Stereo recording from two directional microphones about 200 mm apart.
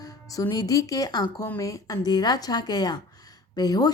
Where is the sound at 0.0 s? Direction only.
15° left (ahead or behind).